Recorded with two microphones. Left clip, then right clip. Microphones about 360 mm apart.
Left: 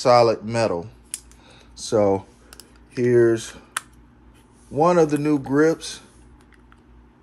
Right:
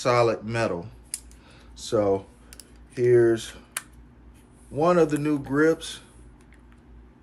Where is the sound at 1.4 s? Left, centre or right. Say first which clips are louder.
Left 5 dB; centre.